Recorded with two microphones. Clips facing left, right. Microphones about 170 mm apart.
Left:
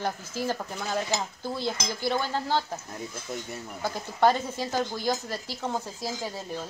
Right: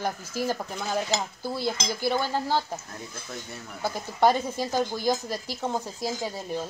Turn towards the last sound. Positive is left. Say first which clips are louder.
# right 3 dB
turn(degrees=-15)  # may be behind; listen again after turning